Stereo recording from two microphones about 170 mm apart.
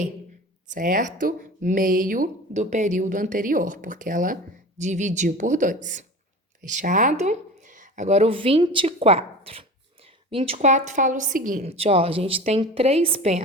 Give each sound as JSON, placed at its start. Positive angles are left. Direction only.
{"t": 0.7, "sound": "speech", "side_deg": -50}
{"t": 11.6, "sound": "a woman's voice", "side_deg": -35}